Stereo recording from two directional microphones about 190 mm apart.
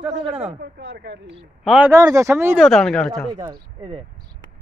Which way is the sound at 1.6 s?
5° right (ahead or behind).